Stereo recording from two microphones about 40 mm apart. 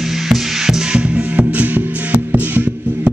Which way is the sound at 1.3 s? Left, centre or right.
Right.